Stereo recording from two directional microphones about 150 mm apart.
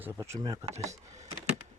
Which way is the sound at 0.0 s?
20° right (ahead or behind).